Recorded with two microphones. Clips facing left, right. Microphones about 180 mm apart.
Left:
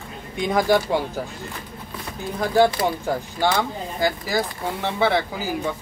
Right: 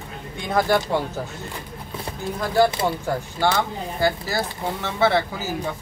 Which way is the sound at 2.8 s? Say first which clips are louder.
Left 1 dB; 25° right (ahead or behind).